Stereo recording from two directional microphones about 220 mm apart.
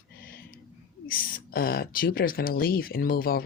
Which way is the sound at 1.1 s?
45° left (ahead or behind).